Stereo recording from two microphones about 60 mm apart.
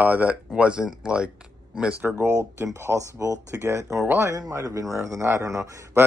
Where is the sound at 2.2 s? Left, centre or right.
Right.